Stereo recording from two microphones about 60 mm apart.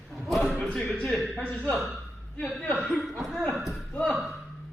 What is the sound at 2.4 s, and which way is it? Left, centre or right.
Speech, centre.